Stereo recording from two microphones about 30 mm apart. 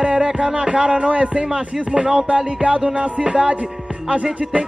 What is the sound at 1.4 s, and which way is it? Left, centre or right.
Speech, right.